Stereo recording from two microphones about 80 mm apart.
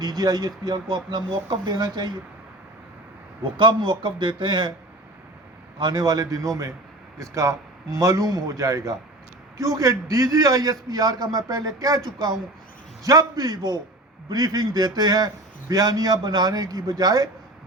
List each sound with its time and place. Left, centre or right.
0.0 s speech: right
3.4 s a man's voice: right
5.7 s a man's voice: right